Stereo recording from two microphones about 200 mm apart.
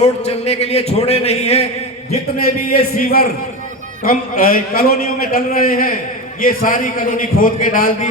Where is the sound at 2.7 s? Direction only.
50° left (ahead or behind).